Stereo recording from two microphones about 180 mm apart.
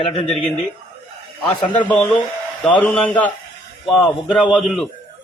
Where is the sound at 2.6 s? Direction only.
5° left (ahead or behind).